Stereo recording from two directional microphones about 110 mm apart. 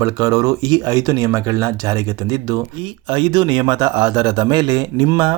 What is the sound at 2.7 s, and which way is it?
Speech, 50° right (ahead or behind).